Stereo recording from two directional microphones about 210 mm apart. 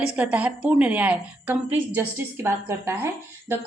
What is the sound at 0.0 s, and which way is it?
A woman's voice, 5° right (ahead or behind).